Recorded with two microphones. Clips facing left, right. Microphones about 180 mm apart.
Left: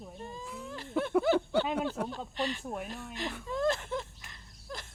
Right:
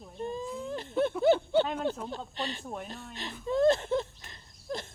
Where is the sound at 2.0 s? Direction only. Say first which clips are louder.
Left 3 dB; 70° left (ahead or behind).